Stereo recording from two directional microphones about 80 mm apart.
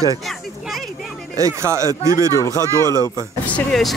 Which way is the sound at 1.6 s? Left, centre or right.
Right.